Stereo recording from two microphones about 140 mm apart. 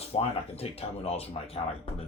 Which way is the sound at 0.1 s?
45° left (ahead or behind).